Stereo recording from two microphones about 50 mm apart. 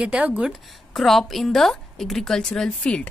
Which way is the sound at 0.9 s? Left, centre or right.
Centre.